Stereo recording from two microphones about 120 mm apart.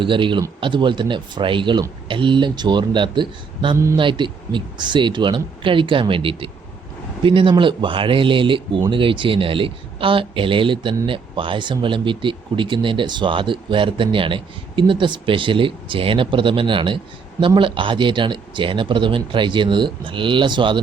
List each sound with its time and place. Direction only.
0.0 s speech: 45° right (ahead or behind)